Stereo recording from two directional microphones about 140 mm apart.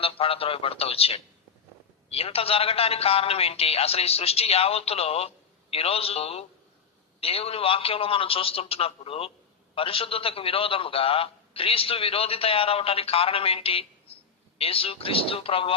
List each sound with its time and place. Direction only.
0.0 s a man's voice: 40° left (ahead or behind)